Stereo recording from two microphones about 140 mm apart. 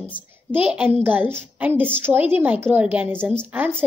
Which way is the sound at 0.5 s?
10° right (ahead or behind).